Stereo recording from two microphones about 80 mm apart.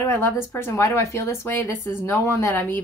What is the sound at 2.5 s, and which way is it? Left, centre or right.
Speech, left.